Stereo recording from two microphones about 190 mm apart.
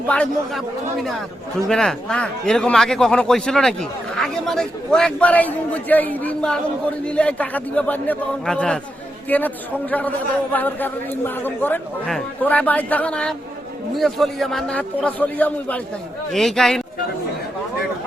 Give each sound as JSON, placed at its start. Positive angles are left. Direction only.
{"t": 0.1, "sound": "speech", "side_deg": 5}
{"t": 1.6, "sound": "a man's voice", "side_deg": 0}